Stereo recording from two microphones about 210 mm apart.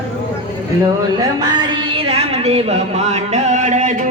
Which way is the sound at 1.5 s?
25° right (ahead or behind).